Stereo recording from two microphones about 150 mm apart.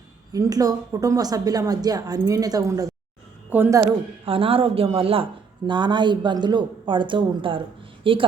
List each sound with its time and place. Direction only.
0.3 s speech: 25° right (ahead or behind)
3.5 s speech: 15° right (ahead or behind)
3.8 s a woman's voice: 30° right (ahead or behind)